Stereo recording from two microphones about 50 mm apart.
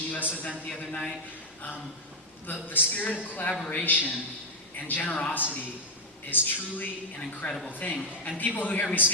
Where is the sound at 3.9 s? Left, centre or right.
Left.